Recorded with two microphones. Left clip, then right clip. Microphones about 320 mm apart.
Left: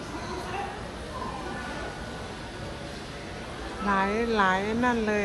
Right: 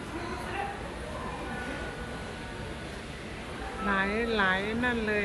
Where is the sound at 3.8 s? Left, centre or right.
Centre.